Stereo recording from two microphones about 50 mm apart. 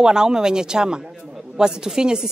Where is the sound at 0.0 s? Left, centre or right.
Centre.